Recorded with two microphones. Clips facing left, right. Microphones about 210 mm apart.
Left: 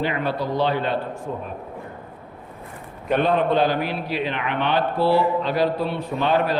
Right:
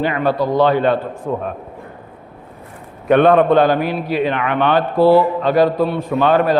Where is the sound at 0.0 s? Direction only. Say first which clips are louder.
Right 7 dB; 50° right (ahead or behind).